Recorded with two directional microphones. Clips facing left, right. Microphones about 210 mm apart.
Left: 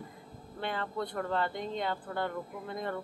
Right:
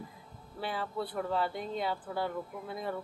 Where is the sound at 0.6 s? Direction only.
5° right (ahead or behind).